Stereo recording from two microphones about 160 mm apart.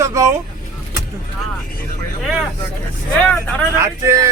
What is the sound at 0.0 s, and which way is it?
Vehicle, 20° right (ahead or behind).